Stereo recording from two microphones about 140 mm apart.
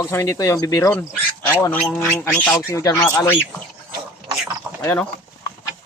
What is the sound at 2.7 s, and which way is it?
Speech, 25° left (ahead or behind).